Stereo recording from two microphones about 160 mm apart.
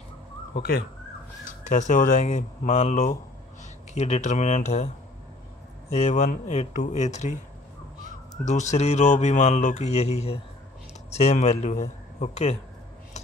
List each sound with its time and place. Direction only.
0.6 s speech: 70° left (ahead or behind)
1.4 s speech: 50° left (ahead or behind)